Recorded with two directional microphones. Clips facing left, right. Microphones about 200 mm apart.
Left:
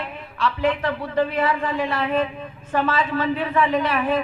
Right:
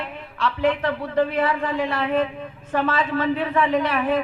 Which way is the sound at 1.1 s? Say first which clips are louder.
Even; 55° right (ahead or behind).